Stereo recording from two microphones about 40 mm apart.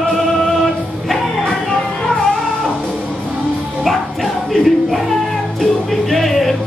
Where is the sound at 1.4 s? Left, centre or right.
Centre.